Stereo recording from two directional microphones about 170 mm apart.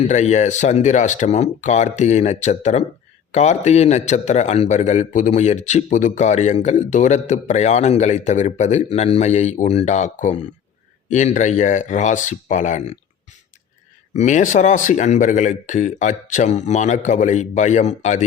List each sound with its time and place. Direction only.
0.1 s a man's voice: 45° left (ahead or behind)
14.2 s a man's voice: 45° left (ahead or behind)